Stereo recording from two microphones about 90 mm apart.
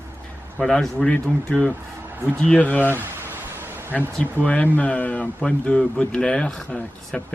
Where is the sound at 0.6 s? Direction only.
5° left (ahead or behind).